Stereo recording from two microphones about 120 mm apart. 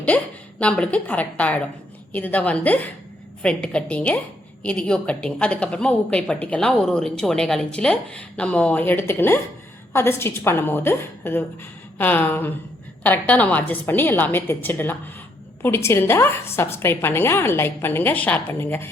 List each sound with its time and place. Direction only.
0.1 s a woman's voice: 10° left (ahead or behind)